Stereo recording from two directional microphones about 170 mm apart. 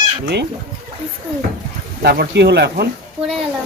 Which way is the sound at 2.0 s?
70° right (ahead or behind).